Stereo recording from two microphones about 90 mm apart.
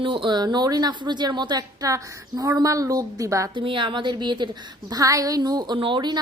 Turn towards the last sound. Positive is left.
turn(degrees=-55)  # may be behind; listen again after turning